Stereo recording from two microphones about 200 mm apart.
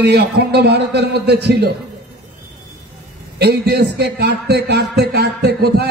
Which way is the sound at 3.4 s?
55° right (ahead or behind).